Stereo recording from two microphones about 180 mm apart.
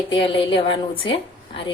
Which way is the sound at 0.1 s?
30° left (ahead or behind).